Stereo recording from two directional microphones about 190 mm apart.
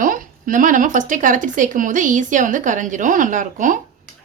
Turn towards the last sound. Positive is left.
turn(degrees=-45)  # may be behind; listen again after turning